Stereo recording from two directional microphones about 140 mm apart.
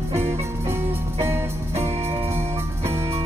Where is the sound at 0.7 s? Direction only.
20° right (ahead or behind).